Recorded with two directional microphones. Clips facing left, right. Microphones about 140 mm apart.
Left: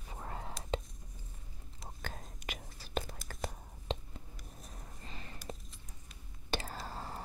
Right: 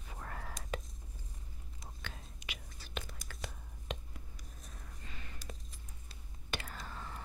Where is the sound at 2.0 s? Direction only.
45° left (ahead or behind).